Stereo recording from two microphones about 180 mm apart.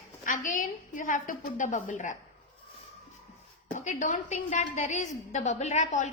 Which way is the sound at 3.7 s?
45° left (ahead or behind).